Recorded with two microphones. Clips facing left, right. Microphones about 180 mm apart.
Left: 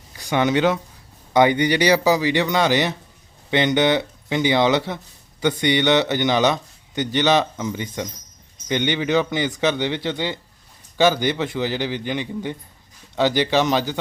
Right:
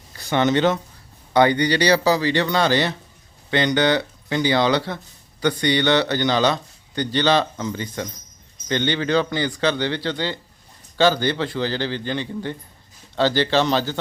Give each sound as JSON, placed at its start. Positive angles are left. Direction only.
{"t": 0.1, "sound": "a man's voice", "side_deg": 10}